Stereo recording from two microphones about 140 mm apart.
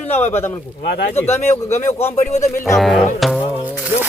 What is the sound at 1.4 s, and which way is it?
Speech, 55° left (ahead or behind).